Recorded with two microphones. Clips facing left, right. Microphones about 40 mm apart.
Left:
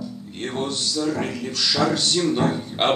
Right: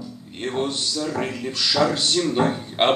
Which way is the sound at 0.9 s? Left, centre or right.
Centre.